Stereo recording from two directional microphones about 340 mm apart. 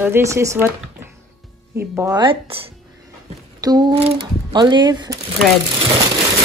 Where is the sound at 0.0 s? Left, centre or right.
Centre.